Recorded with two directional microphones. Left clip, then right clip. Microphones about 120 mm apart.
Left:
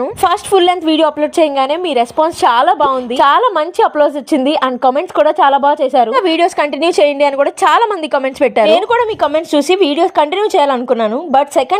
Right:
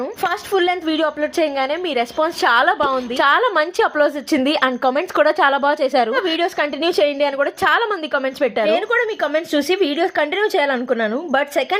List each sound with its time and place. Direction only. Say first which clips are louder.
0.2 s a woman's voice: left 8 dB; 45° left (ahead or behind); by 6.1 s 20° left (ahead or behind)
6.1 s a woman's voice: left 7 dB; 40° left (ahead or behind)
11.1 s a woman's voice: left 7 dB; 15° left (ahead or behind)